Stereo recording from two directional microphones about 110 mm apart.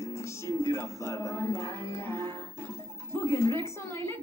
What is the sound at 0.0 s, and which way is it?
Music, 25° left (ahead or behind).